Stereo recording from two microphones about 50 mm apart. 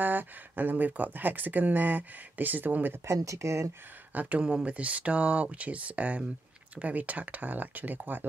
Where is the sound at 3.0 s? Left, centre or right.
Right.